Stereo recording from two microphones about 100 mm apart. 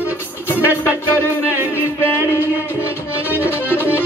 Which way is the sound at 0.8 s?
20° left (ahead or behind).